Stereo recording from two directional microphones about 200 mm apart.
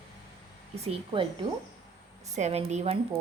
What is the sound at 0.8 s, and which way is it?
Speech, 25° right (ahead or behind).